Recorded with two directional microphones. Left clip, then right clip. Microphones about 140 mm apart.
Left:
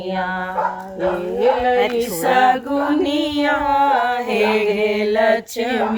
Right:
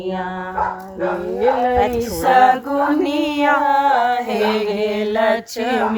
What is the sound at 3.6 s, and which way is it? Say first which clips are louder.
Speech: right 1 dB; 20° left (ahead or behind).